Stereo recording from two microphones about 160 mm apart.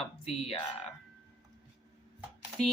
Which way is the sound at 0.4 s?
40° left (ahead or behind).